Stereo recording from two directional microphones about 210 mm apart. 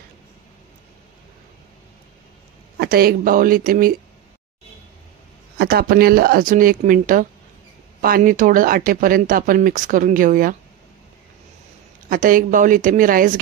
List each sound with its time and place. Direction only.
2.8 s speech: 45° right (ahead or behind)
5.6 s speech: 45° right (ahead or behind)
12.1 s speech: 40° right (ahead or behind)